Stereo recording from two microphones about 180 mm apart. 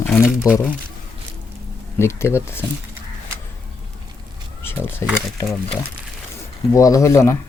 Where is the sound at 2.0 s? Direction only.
15° left (ahead or behind).